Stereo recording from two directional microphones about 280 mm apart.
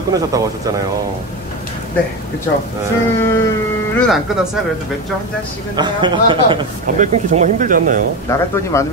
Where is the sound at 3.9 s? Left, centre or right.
Centre.